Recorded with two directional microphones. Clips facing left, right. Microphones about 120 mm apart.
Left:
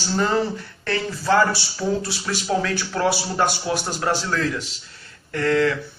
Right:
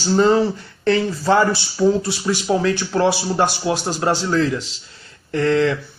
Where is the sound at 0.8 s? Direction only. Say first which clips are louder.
Right 6 dB; 20° right (ahead or behind).